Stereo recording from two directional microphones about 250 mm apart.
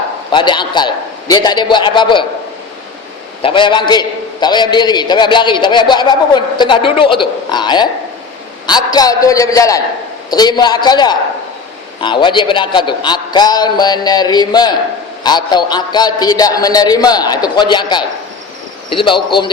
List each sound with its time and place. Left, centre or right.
0.3 s a man's voice: centre
3.4 s a man's voice: centre